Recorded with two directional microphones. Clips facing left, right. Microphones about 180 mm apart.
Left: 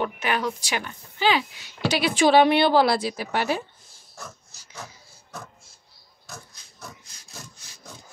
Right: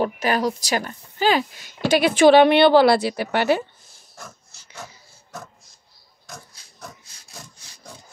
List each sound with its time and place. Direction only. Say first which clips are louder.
0.0 s a woman's voice: right 5 dB; 40° right (ahead or behind); by 3.6 s 70° right (ahead or behind)